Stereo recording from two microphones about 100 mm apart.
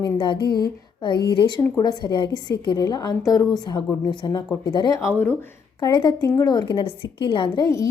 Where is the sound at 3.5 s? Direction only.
45° left (ahead or behind).